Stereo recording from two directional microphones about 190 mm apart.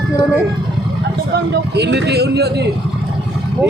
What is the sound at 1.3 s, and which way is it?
A man's voice, 65° right (ahead or behind).